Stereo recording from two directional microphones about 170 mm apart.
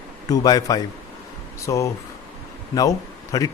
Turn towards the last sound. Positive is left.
turn(degrees=20)  # may be behind; listen again after turning